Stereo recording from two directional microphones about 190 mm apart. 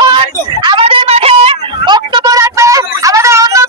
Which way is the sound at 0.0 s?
25° right (ahead or behind).